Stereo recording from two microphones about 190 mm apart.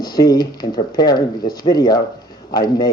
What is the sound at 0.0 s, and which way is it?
Speech, 20° left (ahead or behind).